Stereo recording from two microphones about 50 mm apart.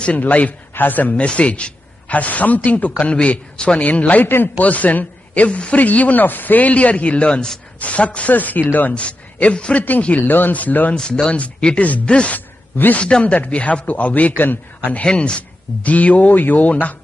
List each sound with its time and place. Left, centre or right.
0.2 s a man's voice: left
1.2 s a man's voice: left
8.9 s a man's voice: left
11.0 s a man's voice: centre
12.4 s a sound: left
13.0 s a man's voice: left
15.0 s a man's voice: centre